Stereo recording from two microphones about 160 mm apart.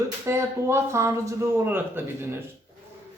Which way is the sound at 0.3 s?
15° right (ahead or behind).